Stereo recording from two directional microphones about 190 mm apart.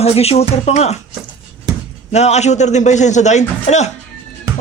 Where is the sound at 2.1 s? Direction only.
35° left (ahead or behind).